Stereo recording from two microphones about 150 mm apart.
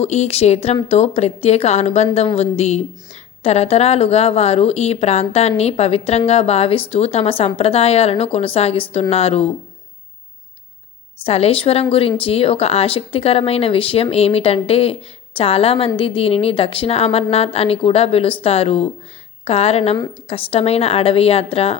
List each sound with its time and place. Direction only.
0.0 s a woman's voice: 45° left (ahead or behind)
11.3 s a woman's voice: 40° left (ahead or behind)